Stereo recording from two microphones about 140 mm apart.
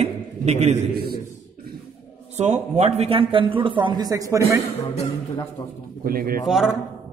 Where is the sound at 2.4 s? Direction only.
50° right (ahead or behind); by 4.6 s 20° right (ahead or behind).